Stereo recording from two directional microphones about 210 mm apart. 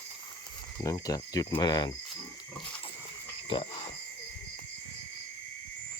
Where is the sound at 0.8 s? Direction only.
15° left (ahead or behind).